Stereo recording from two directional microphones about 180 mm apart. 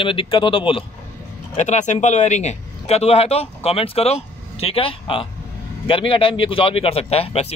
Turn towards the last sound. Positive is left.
turn(degrees=35)  # may be behind; listen again after turning